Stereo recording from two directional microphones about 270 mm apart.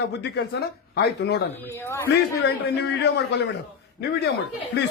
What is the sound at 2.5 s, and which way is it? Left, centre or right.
Speech, left.